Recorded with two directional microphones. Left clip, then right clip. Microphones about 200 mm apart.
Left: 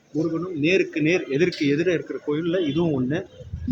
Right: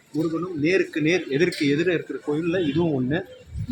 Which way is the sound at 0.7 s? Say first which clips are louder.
Left 1 dB; 15° left (ahead or behind).